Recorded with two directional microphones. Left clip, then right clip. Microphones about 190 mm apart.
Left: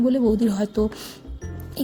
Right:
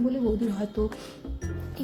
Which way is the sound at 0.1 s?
45° left (ahead or behind).